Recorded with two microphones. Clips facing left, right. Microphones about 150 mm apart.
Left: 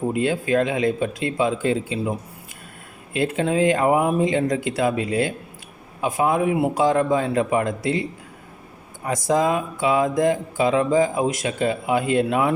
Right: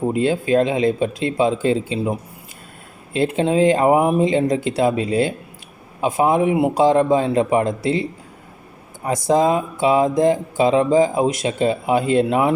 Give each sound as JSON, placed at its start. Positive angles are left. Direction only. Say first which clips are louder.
{"t": 0.0, "sound": "speech", "louder": "right 3 dB", "side_deg": -30}
{"t": 9.0, "sound": "speech", "louder": "right 4 dB", "side_deg": -25}